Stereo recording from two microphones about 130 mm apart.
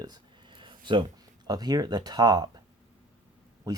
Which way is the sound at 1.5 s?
30° right (ahead or behind).